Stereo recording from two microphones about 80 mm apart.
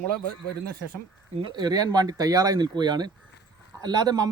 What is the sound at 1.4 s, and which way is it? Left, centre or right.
Speech, right.